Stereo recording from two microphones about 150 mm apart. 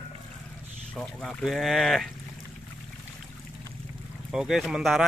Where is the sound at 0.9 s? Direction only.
Centre (ahead or behind).